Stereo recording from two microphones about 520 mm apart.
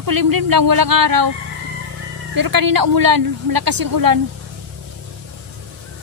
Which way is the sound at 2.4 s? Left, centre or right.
Right.